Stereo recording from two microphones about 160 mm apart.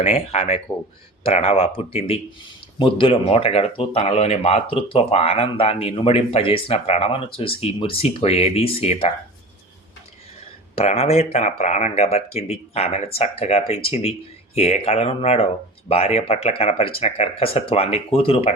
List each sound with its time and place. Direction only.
0.0 s speech: 40° left (ahead or behind)
10.8 s speech: 40° left (ahead or behind)